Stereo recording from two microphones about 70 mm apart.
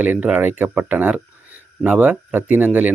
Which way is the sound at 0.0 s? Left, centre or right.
Right.